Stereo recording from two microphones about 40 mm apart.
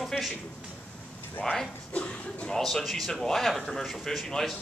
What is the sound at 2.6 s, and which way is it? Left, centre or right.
A man's voice, centre.